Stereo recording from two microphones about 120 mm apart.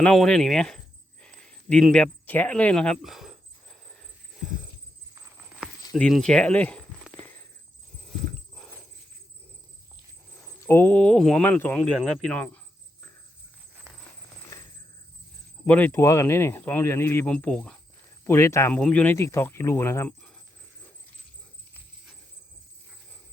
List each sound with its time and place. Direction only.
0.0 s speech: 5° left (ahead or behind)
1.2 s a sound: 10° left (ahead or behind)
6.0 s a sound: 5° left (ahead or behind)
10.6 s speech: 20° left (ahead or behind)
14.5 s a sound: 25° left (ahead or behind)
15.6 s speech: 15° left (ahead or behind)
15.9 s speech: 25° left (ahead or behind); by 17.7 s 10° left (ahead or behind)
18.3 s speech: 25° left (ahead or behind)
18.7 s speech: 10° left (ahead or behind)
19.1 s speech: 25° left (ahead or behind)